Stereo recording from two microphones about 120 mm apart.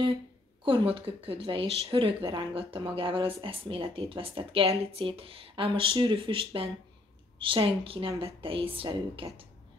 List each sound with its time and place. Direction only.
0.7 s speech: 45° right (ahead or behind)